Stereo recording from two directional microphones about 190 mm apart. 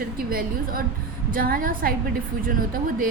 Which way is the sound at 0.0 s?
50° right (ahead or behind).